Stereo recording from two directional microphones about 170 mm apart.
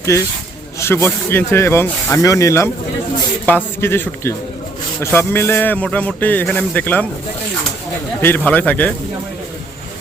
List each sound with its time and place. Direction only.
0.1 s speech: 15° left (ahead or behind)
8.2 s speech: 10° left (ahead or behind)